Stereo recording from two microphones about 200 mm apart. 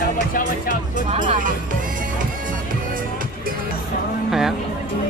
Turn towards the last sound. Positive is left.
turn(degrees=0)  # may be behind; listen again after turning